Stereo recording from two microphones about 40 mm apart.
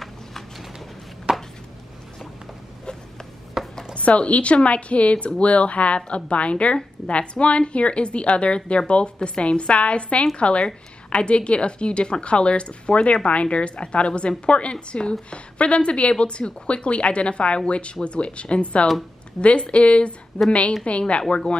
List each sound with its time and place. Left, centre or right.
1.3 s chopping: centre
3.6 s a sound: centre
3.9 s a woman's voice: left